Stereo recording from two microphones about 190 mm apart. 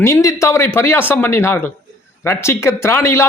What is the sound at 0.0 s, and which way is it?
A man's voice, 15° left (ahead or behind).